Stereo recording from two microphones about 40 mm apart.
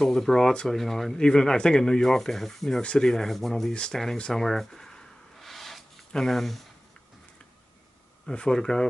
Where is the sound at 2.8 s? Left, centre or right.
Left.